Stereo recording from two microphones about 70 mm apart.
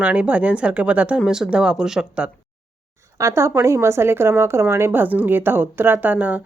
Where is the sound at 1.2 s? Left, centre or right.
Centre.